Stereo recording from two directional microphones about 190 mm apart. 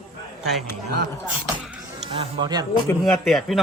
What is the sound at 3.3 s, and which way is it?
Speech, centre (ahead or behind).